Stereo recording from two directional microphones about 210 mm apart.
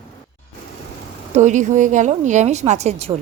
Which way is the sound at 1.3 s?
35° right (ahead or behind).